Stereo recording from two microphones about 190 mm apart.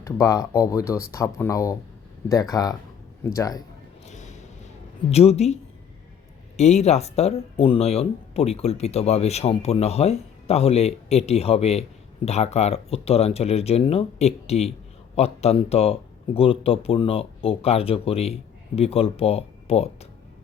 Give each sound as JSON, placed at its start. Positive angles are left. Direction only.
{"t": 0.0, "sound": "speech", "side_deg": 15}
{"t": 4.0, "sound": "a sound", "side_deg": 35}
{"t": 5.1, "sound": "speech", "side_deg": 35}
{"t": 6.6, "sound": "speech", "side_deg": 35}